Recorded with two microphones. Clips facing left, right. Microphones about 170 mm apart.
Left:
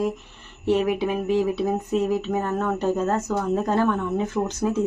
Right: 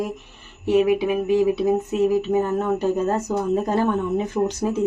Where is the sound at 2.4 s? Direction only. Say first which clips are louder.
Right 2 dB; 15° right (ahead or behind).